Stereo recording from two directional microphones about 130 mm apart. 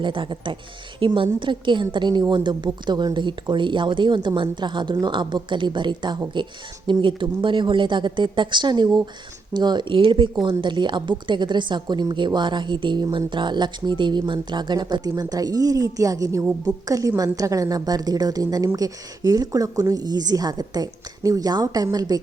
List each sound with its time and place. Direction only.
0.0 s a woman's voice: 40° right (ahead or behind)